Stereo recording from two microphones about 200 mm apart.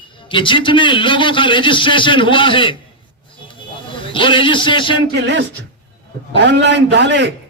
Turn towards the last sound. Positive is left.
turn(degrees=-60)  # may be behind; listen again after turning